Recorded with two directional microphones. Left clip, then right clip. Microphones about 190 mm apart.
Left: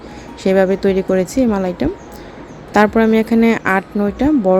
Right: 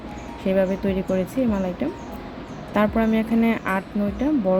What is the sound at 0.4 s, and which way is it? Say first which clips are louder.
Speech: left 8 dB; 55° left (ahead or behind).